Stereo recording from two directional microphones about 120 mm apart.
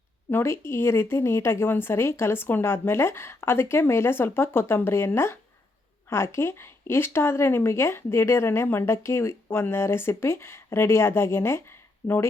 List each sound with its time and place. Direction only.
0.3 s speech: 20° left (ahead or behind)